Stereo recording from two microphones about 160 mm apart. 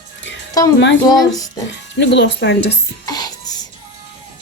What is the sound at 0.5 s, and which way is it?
Speech, 25° left (ahead or behind).